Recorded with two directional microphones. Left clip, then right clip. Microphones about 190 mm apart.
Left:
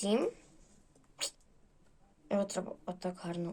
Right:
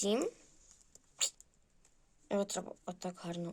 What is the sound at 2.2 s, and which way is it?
Speech, 35° right (ahead or behind).